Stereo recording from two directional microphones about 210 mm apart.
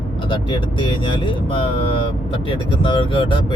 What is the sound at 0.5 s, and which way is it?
Speech, 25° left (ahead or behind).